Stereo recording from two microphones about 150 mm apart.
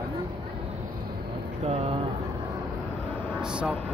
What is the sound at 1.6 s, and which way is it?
Speech, 45° right (ahead or behind).